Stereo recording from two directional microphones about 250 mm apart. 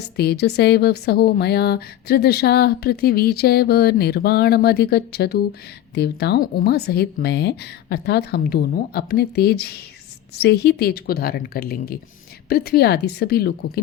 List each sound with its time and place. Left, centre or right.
0.0 s speech: left